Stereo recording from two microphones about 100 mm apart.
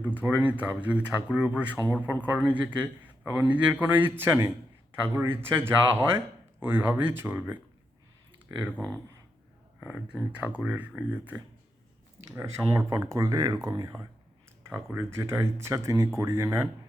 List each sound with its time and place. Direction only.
0.1 s a man's voice: 20° right (ahead or behind)
4.2 s a sound: 25° right (ahead or behind)
5.1 s speech: 20° right (ahead or behind)
8.7 s speech: 15° left (ahead or behind)
9.8 s a man's voice: 15° right (ahead or behind)
12.4 s speech: 30° right (ahead or behind)